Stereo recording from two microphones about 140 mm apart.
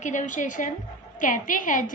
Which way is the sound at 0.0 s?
60° left (ahead or behind).